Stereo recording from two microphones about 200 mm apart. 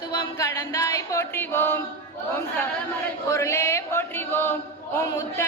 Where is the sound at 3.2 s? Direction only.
15° left (ahead or behind).